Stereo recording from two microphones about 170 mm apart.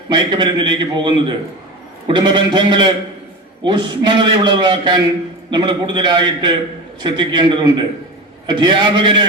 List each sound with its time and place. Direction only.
0.1 s a man's voice: 25° right (ahead or behind)